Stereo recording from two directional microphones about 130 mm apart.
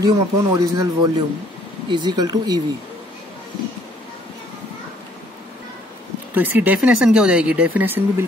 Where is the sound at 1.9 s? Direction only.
35° right (ahead or behind).